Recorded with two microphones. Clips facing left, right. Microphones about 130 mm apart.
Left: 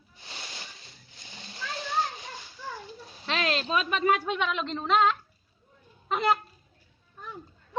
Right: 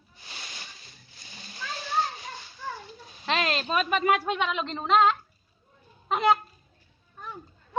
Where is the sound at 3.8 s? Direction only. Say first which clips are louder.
Right 2 dB; 5° right (ahead or behind).